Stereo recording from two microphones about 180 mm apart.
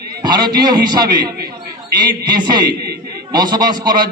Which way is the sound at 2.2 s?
25° right (ahead or behind).